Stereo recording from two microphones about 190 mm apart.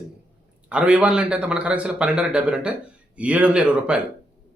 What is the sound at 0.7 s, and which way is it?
Speech, 5° right (ahead or behind).